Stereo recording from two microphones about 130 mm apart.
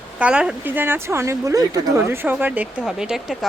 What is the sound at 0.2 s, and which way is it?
Speech, 10° right (ahead or behind).